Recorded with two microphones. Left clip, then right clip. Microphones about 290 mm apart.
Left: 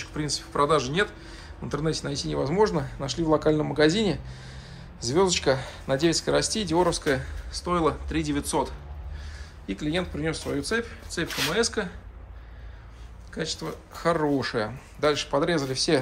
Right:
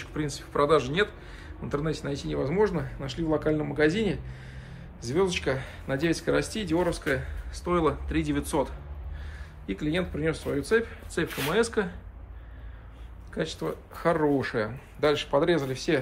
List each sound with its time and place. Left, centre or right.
0.0 s speech: centre
13.3 s speech: centre